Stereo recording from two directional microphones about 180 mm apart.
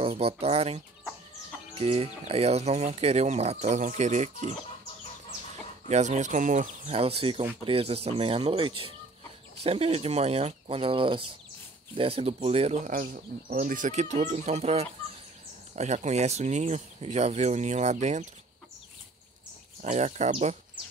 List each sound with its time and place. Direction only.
0.0 s speech: 35° right (ahead or behind)
5.9 s speech: 40° right (ahead or behind)
19.8 s speech: 40° right (ahead or behind)